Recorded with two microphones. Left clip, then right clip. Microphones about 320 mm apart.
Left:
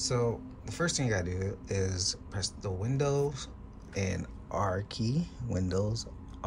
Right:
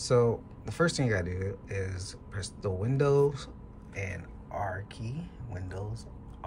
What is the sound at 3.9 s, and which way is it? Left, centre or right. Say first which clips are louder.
Speech: left 3 dB; centre.